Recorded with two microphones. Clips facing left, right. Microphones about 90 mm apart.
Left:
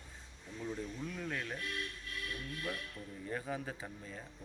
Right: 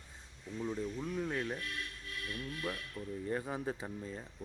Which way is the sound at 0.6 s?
20° right (ahead or behind).